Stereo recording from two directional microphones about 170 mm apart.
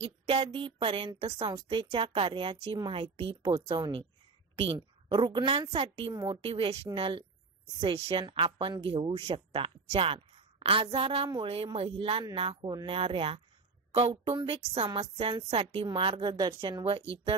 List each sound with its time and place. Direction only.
0.0 s a woman's voice: 35° right (ahead or behind)